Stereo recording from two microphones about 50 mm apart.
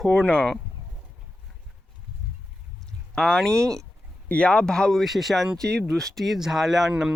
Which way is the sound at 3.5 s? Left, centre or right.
Right.